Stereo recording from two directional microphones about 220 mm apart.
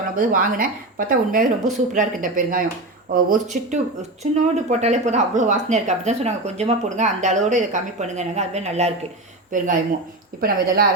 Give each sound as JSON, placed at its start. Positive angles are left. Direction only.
{"t": 0.2, "sound": "speech", "side_deg": -40}